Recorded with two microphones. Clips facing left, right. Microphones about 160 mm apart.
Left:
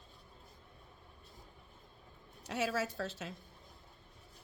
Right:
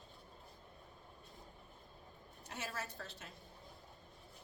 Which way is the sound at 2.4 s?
90° left.